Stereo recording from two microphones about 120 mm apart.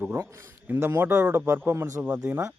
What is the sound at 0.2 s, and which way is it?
Speech, 25° right (ahead or behind).